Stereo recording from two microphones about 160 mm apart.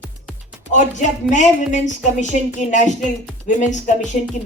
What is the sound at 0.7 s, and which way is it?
Speech, 50° left (ahead or behind).